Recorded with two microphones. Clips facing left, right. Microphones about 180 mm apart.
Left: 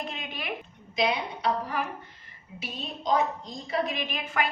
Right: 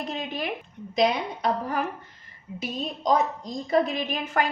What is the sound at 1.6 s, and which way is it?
A woman's voice, 45° right (ahead or behind).